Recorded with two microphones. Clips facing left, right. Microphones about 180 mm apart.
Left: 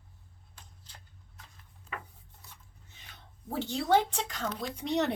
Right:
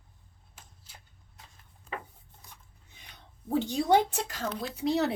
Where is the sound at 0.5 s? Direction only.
10° right (ahead or behind).